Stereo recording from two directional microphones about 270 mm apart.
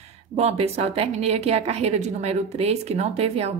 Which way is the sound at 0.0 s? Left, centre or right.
Right.